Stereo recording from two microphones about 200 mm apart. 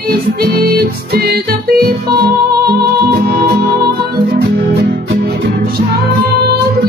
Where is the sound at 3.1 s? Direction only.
50° right (ahead or behind).